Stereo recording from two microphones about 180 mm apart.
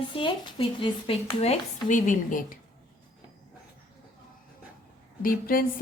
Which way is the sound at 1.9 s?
45° left (ahead or behind).